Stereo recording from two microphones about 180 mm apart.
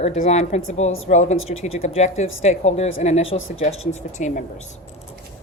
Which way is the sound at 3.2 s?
90° left.